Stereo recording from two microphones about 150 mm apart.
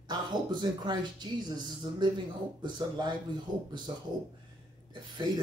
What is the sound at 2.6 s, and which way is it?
Speech, 30° right (ahead or behind).